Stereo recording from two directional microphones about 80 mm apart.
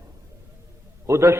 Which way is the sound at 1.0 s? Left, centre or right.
Right.